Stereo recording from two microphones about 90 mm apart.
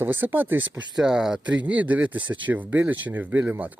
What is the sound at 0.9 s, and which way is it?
Speech, 5° right (ahead or behind).